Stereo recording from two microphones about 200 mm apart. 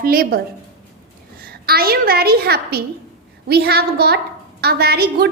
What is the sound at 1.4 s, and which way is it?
A woman's voice, 50° right (ahead or behind).